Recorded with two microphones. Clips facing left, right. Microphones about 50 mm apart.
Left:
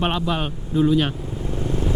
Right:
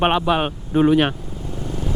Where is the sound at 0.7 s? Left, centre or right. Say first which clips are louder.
Right 3 dB; right.